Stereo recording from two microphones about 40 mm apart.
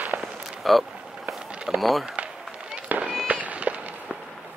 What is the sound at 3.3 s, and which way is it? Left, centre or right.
Run, right.